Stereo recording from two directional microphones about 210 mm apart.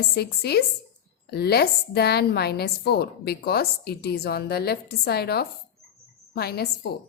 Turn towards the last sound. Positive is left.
turn(degrees=50)  # may be behind; listen again after turning